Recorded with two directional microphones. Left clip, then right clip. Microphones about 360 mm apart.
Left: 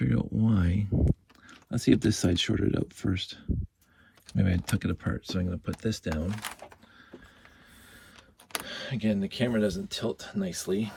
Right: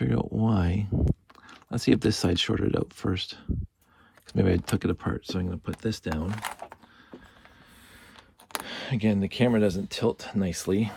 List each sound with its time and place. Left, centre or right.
0.0 s speech: centre
8.6 s speech: centre